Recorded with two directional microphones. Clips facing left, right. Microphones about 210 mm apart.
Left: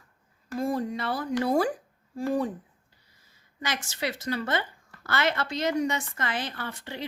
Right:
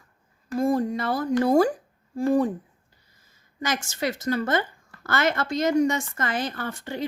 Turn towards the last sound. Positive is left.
turn(degrees=-45)  # may be behind; listen again after turning